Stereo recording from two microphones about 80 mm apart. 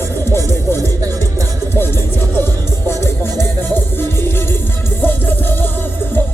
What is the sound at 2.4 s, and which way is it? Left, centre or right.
Music, left.